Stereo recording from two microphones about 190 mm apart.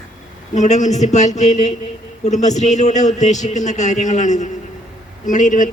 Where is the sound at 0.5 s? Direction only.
40° left (ahead or behind).